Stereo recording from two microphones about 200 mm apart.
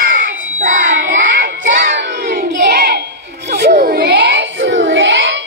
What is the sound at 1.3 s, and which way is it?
Child singing, 60° right (ahead or behind).